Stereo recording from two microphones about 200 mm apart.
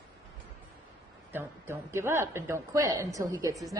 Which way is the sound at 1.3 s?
10° right (ahead or behind).